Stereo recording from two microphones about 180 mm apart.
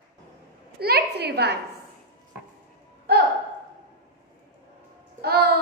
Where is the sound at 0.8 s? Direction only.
60° right (ahead or behind).